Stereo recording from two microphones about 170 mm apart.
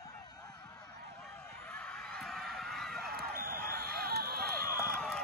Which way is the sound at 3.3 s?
60° right (ahead or behind).